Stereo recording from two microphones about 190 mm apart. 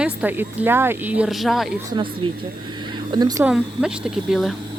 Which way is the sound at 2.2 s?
25° right (ahead or behind).